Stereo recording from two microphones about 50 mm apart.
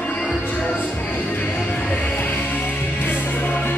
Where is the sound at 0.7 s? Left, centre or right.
Left.